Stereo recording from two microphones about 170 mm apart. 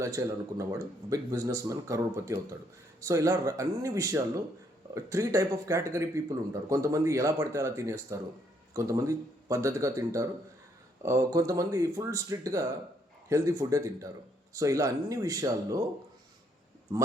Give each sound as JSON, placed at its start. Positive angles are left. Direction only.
{"t": 0.0, "sound": "speech", "side_deg": -15}